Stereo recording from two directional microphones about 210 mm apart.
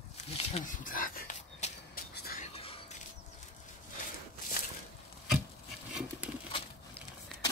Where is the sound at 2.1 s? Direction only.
50° left (ahead or behind).